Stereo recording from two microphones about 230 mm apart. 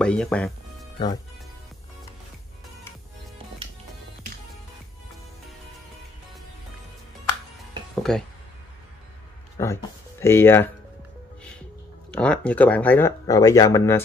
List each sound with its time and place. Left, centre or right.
0.0 s speech: centre
0.9 s speech: centre
7.9 s dishes: centre
9.6 s speech: centre
12.1 s speech: centre